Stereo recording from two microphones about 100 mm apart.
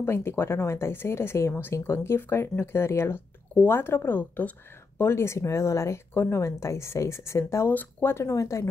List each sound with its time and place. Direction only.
0.0 s speech: 25° left (ahead or behind)